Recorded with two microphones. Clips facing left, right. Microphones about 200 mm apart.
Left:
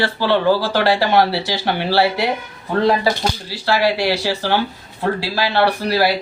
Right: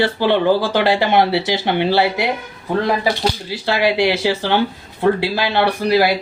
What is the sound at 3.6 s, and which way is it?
Speech, 20° right (ahead or behind).